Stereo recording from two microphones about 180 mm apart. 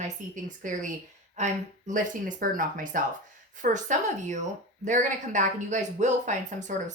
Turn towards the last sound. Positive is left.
turn(degrees=-40)  # may be behind; listen again after turning